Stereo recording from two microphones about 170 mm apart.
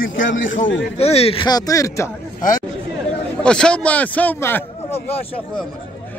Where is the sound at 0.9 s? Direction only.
35° left (ahead or behind); by 2.0 s 20° left (ahead or behind).